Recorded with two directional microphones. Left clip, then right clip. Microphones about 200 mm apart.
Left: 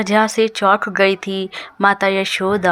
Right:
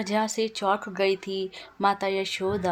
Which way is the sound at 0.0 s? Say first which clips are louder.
Left 11 dB; 15° left (ahead or behind).